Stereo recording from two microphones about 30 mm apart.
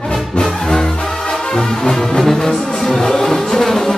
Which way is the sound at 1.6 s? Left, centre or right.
Left.